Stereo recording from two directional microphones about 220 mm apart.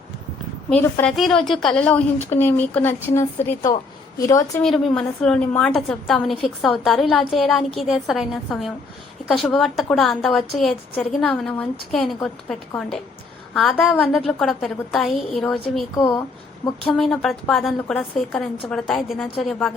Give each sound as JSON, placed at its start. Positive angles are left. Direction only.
{"t": 0.7, "sound": "a woman's voice", "side_deg": 10}
{"t": 4.6, "sound": "a woman's voice", "side_deg": 0}